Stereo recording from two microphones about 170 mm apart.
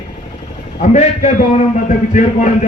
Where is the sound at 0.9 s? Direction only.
40° left (ahead or behind).